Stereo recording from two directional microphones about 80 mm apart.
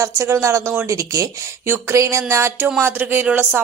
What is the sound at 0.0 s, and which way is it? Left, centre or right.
Speech, right.